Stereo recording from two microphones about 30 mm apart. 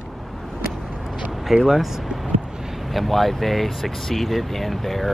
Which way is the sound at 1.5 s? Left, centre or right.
Centre.